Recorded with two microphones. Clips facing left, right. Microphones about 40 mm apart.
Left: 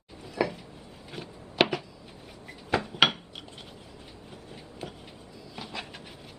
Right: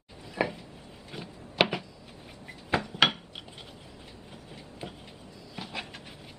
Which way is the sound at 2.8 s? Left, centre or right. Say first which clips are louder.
Left 1 dB; centre.